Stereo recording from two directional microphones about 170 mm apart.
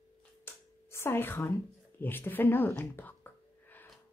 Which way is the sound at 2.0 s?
10° left (ahead or behind).